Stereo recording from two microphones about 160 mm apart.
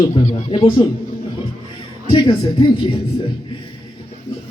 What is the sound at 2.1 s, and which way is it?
Speech, 30° left (ahead or behind).